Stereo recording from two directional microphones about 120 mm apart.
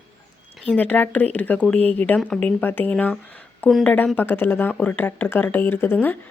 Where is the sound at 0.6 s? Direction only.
10° left (ahead or behind).